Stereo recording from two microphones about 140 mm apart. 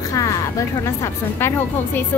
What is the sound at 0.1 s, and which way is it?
A woman's voice, 25° left (ahead or behind).